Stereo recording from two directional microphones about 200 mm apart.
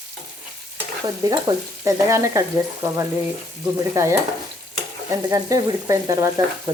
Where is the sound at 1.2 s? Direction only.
15° right (ahead or behind).